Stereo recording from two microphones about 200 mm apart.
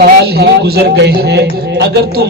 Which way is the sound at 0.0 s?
55° right (ahead or behind).